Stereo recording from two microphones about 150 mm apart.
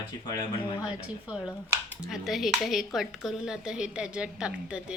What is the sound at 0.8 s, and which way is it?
A woman's voice, 5° right (ahead or behind).